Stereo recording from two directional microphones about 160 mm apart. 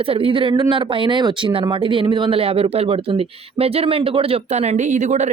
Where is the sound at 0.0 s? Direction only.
35° right (ahead or behind).